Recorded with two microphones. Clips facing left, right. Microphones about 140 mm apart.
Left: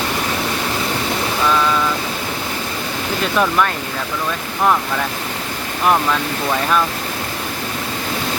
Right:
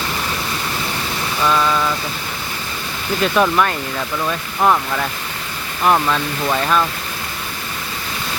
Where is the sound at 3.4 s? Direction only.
5° right (ahead or behind).